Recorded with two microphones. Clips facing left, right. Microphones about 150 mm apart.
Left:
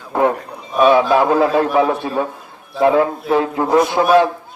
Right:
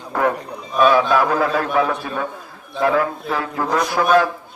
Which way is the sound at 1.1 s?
25° left (ahead or behind).